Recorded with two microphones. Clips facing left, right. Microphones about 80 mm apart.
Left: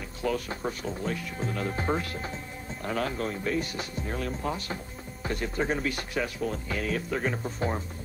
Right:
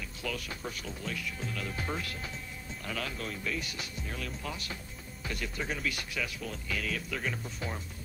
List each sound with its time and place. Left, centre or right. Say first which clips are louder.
0.2 s speech: left 9 dB; left